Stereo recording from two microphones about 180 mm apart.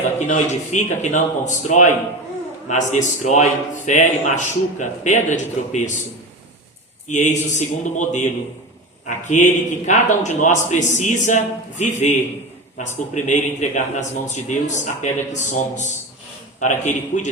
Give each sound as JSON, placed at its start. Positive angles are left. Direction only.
{"t": 0.2, "sound": "speech", "side_deg": 40}
{"t": 7.1, "sound": "a man's voice", "side_deg": 40}
{"t": 13.1, "sound": "a man's voice", "side_deg": 45}